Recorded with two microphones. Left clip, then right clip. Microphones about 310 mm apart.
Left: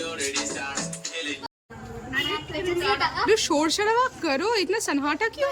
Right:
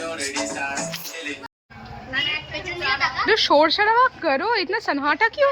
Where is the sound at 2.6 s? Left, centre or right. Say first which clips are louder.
Right 1 dB; centre.